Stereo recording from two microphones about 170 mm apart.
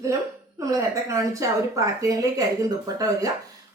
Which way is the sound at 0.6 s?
20° right (ahead or behind).